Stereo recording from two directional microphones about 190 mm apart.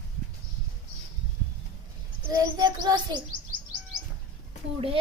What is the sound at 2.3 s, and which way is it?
Speech, 20° right (ahead or behind).